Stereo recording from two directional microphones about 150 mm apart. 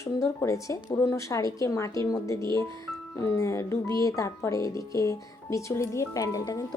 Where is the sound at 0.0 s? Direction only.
20° left (ahead or behind).